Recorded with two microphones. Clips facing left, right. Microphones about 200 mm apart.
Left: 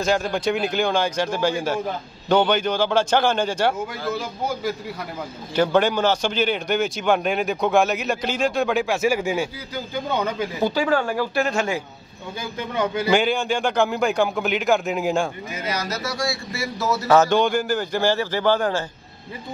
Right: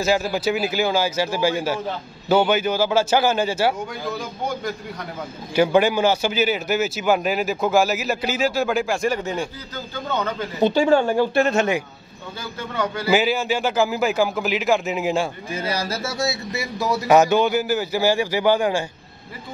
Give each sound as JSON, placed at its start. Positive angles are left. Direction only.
{"t": 0.0, "sound": "a man's voice", "side_deg": -5}
{"t": 4.1, "sound": "speech", "side_deg": 5}
{"t": 5.5, "sound": "speech", "side_deg": -10}
{"t": 10.6, "sound": "speech", "side_deg": -25}
{"t": 12.5, "sound": "a man's voice", "side_deg": 15}
{"t": 13.1, "sound": "speech", "side_deg": -5}
{"t": 15.5, "sound": "a man's voice", "side_deg": -30}